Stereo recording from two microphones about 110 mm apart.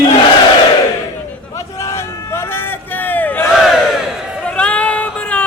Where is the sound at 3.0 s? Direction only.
15° left (ahead or behind).